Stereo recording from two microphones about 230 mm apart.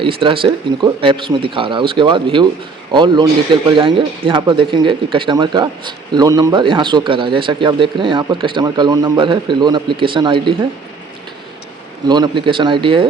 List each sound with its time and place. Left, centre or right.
0.0 s speech: right
12.0 s speech: centre